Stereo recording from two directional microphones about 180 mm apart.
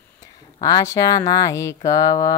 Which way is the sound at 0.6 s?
20° left (ahead or behind).